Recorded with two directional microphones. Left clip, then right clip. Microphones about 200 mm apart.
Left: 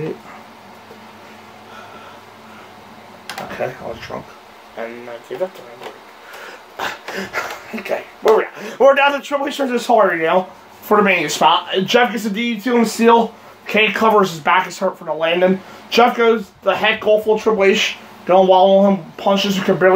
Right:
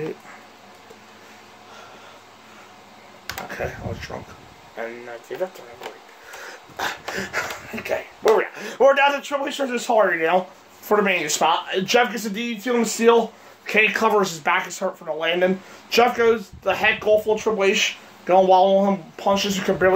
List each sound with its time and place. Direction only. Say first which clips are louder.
3.4 s speech: left 6 dB; 25° right (ahead or behind)
6.8 s speech: left 2 dB; 25° right (ahead or behind)
11.7 s speech: left 4 dB; 30° right (ahead or behind)
17.6 s speech: left 5 dB; 15° right (ahead or behind)
18.3 s speech: left 4 dB; 25° right (ahead or behind)